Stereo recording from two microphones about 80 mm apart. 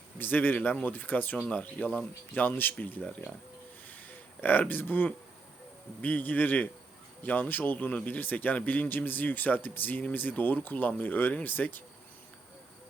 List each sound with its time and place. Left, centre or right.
0.2 s speech: left
2.4 s speech: left
3.8 s a sound: left
6.0 s speech: left